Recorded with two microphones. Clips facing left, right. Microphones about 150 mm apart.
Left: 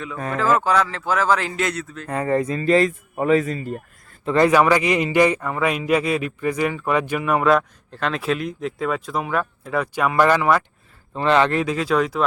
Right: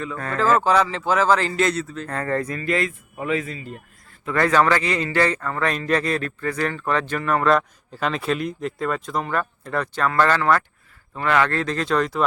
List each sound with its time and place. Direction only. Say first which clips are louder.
0.2 s a man's voice: even; 15° left (ahead or behind)
0.7 s a man's voice: right 1 dB; centre (ahead or behind)
2.0 s a man's voice: left 6 dB; 15° left (ahead or behind)
2.6 s speech: left 6 dB; 35° left (ahead or behind)
4.3 s a man's voice: left 3 dB; 20° left (ahead or behind)
11.1 s a man's voice: left 3 dB; 25° left (ahead or behind)
11.6 s a man's voice: left 2 dB; 5° left (ahead or behind)